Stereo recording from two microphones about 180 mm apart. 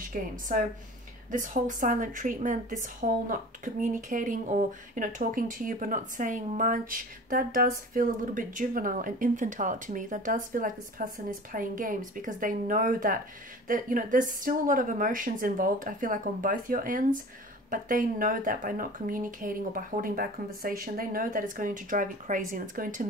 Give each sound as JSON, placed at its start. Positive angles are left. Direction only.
{"t": 0.1, "sound": "a woman's voice", "side_deg": -50}